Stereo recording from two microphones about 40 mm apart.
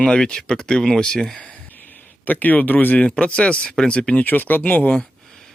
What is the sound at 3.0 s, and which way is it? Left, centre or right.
Speech, left.